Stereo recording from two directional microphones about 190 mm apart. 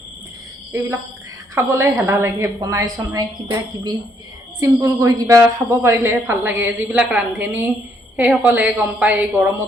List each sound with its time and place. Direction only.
0.7 s a woman's voice: 10° right (ahead or behind)
4.6 s a woman's voice: 15° right (ahead or behind)